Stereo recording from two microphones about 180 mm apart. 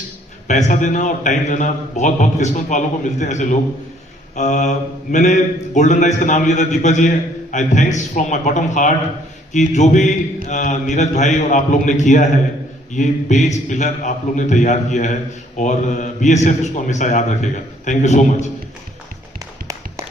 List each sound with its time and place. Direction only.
0.4 s a man's voice: 45° left (ahead or behind)